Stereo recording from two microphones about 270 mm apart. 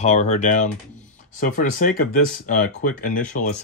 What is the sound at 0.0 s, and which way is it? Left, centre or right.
Speech, left.